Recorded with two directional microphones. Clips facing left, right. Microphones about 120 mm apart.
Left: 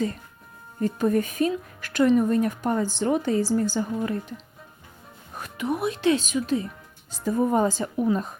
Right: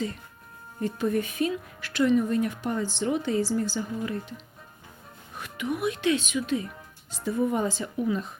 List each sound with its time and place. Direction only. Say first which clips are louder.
0.8 s speech: left 4 dB; 45° left (ahead or behind)
5.4 s speech: left 2 dB; 35° left (ahead or behind)